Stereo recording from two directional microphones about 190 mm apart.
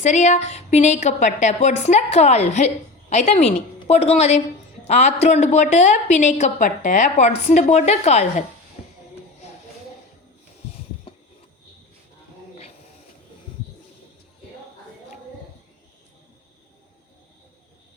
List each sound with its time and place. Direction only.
0.0 s a woman's voice: 40° left (ahead or behind)